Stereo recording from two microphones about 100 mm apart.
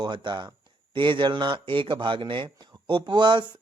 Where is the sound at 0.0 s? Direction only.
50° right (ahead or behind).